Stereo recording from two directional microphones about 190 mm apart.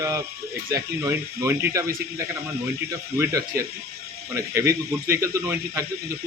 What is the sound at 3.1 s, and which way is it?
Speech, 15° right (ahead or behind).